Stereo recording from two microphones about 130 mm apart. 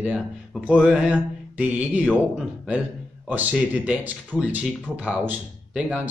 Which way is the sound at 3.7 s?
10° right (ahead or behind).